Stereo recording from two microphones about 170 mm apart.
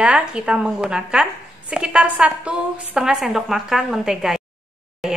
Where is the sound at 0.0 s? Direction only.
5° right (ahead or behind).